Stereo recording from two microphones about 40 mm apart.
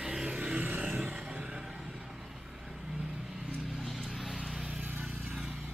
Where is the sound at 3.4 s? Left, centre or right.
Right.